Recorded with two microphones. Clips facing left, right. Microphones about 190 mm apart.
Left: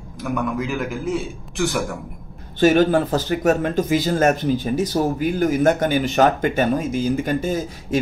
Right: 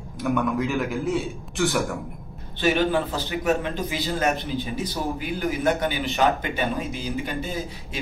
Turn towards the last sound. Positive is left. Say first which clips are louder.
# left 8 dB
turn(degrees=45)  # may be behind; listen again after turning